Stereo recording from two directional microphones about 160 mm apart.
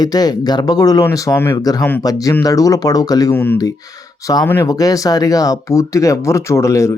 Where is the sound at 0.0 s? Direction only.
25° left (ahead or behind).